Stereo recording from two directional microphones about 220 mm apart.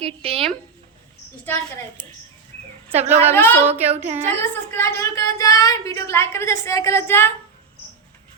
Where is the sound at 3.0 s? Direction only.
30° right (ahead or behind).